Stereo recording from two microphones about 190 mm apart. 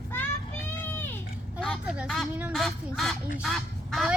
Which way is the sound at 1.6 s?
Centre (ahead or behind).